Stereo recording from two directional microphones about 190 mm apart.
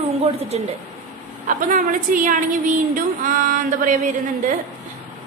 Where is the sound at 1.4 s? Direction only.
45° right (ahead or behind).